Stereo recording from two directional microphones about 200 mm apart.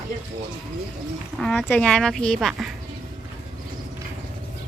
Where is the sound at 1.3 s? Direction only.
Centre (ahead or behind).